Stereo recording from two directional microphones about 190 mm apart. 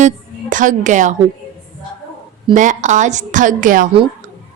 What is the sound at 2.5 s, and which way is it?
A woman's voice, 40° right (ahead or behind).